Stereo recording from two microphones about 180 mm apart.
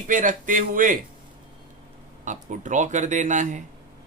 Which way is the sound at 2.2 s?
45° right (ahead or behind).